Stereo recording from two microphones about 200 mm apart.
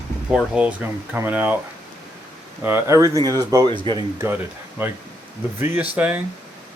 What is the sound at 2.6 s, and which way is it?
Speech, 10° right (ahead or behind).